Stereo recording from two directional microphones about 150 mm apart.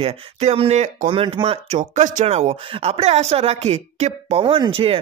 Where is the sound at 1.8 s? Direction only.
55° right (ahead or behind).